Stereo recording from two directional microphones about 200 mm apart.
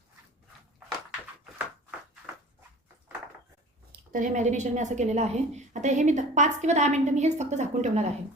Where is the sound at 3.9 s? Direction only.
40° right (ahead or behind).